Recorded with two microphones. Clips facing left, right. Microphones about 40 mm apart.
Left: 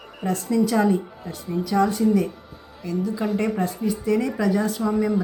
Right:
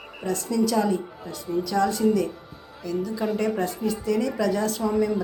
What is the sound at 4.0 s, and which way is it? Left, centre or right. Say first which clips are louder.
A woman's voice: left 2 dB; centre.